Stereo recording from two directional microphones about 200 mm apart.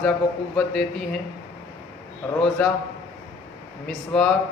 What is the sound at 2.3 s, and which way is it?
Speech, 5° left (ahead or behind).